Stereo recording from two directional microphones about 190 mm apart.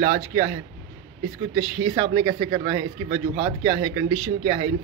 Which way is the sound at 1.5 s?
25° right (ahead or behind).